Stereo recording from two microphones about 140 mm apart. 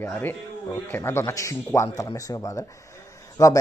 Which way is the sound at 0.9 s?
15° left (ahead or behind).